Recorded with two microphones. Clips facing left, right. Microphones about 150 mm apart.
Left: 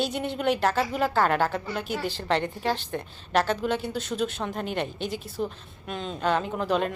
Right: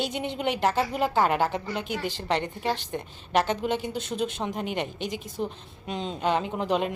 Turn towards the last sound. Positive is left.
turn(degrees=-15)  # may be behind; listen again after turning